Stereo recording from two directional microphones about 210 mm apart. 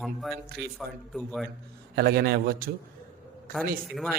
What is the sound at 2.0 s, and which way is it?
Speech, 50° right (ahead or behind).